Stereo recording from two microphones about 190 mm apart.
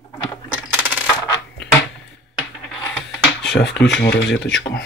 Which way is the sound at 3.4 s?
70° left (ahead or behind).